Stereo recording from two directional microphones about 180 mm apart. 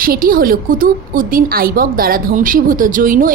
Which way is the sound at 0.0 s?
55° right (ahead or behind).